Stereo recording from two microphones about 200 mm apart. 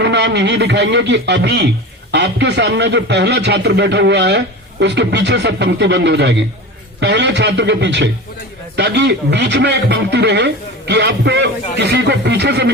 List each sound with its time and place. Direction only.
0.0 s a man's voice: 60° right (ahead or behind)